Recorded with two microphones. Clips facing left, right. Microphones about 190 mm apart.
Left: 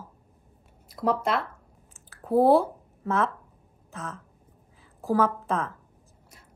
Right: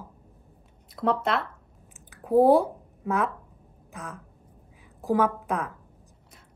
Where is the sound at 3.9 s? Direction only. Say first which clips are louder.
Left 2 dB; 15° right (ahead or behind).